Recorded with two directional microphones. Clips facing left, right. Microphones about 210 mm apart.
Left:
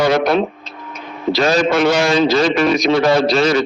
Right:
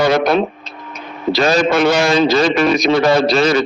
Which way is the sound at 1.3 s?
50° right (ahead or behind).